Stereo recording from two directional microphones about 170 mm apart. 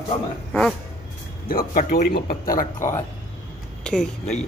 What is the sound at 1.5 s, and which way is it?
Speech, 60° left (ahead or behind).